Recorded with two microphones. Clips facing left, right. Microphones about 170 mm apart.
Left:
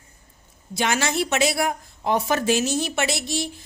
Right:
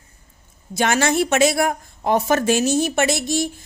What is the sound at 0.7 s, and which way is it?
A woman's voice, 50° right (ahead or behind).